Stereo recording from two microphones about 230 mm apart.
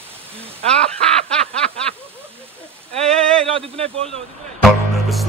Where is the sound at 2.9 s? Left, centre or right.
Right.